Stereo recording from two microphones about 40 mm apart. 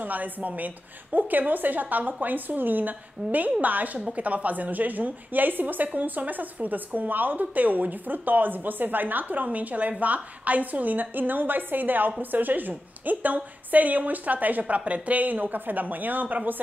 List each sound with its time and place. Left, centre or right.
0.0 s speech: right